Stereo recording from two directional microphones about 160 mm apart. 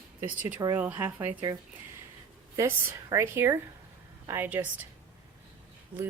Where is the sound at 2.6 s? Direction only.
20° right (ahead or behind).